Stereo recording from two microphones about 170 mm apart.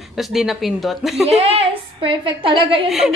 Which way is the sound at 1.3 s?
35° right (ahead or behind).